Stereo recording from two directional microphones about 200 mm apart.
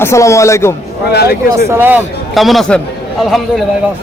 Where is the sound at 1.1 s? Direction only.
55° left (ahead or behind).